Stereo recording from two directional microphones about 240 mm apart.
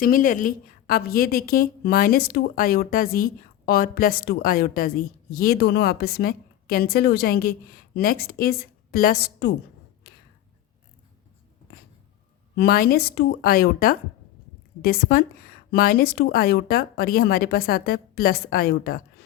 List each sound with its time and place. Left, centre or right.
0.0 s a woman's voice: left
12.5 s a woman's voice: left